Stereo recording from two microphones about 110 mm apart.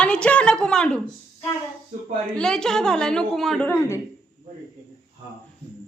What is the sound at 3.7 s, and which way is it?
Speech, 25° left (ahead or behind).